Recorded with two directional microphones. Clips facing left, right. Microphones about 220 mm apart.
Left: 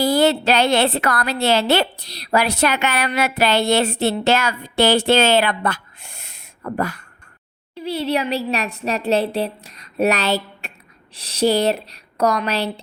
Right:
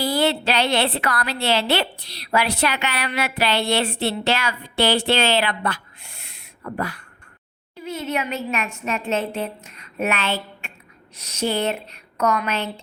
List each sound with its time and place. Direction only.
0.0 s a woman's voice: 45° left (ahead or behind)
7.9 s a woman's voice: 35° left (ahead or behind)